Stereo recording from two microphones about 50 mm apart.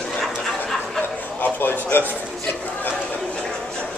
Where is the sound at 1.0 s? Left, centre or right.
Left.